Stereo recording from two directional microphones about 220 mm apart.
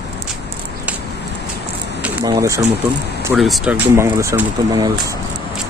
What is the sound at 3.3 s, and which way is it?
Speech, centre (ahead or behind).